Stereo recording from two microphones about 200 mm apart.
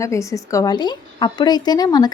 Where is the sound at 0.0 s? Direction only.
15° left (ahead or behind).